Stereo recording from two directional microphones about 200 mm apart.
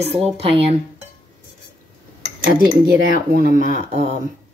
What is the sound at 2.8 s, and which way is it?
Speech, 45° right (ahead or behind).